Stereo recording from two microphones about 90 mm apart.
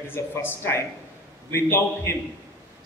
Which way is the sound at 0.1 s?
25° left (ahead or behind).